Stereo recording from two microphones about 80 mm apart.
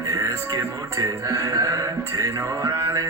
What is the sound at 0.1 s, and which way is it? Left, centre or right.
Music, right.